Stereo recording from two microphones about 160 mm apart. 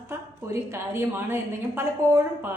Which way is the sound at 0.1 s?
15° right (ahead or behind).